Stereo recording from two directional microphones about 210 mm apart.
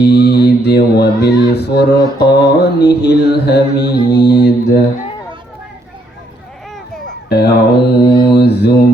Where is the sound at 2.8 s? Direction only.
50° left (ahead or behind).